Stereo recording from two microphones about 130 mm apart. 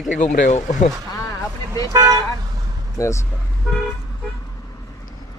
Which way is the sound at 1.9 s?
30° right (ahead or behind).